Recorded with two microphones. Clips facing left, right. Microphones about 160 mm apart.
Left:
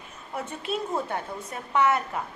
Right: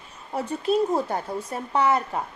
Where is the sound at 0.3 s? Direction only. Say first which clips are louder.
Right 8 dB; 35° right (ahead or behind).